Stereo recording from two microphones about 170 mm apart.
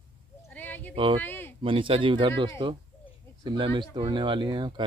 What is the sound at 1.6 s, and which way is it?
Speech, 30° right (ahead or behind).